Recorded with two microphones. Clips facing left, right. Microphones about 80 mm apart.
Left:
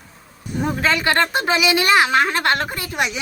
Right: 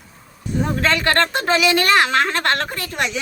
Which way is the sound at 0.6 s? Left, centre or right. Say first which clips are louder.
Even; centre.